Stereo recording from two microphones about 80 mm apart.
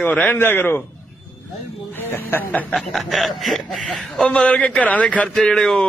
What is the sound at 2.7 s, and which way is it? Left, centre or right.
Speech, centre.